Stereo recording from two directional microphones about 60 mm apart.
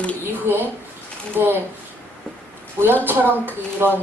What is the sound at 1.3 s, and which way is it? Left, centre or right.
Speech, right.